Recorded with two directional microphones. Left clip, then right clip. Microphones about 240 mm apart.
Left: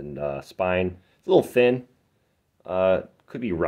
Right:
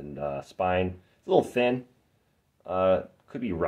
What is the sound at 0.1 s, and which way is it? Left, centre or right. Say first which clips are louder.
Speech: left 3 dB; left.